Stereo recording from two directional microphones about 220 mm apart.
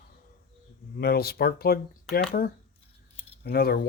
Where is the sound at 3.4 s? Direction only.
45° left (ahead or behind).